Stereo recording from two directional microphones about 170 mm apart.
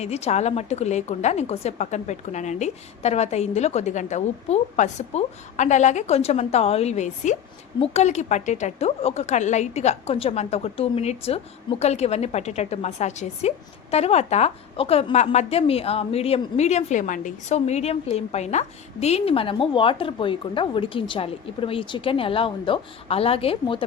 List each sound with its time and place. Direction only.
0.0 s a woman's voice: 40° left (ahead or behind)